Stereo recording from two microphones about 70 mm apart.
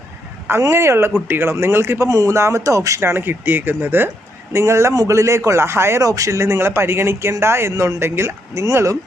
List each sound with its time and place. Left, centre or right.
0.7 s speech: right
3.0 s speech: right
4.5 s speech: right
6.0 s speech: right
8.6 s speech: right